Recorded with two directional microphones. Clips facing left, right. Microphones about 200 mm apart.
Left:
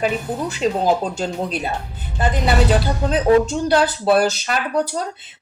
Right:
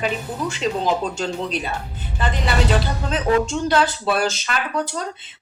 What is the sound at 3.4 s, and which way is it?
Speech, 35° left (ahead or behind).